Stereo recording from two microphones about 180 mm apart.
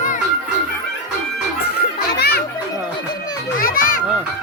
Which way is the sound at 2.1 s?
60° left (ahead or behind).